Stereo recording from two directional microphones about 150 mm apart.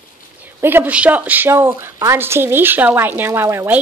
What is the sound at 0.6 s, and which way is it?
A woman's voice, 15° right (ahead or behind).